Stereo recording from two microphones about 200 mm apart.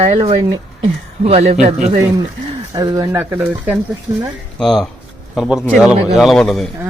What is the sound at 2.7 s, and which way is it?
Speech, 20° right (ahead or behind).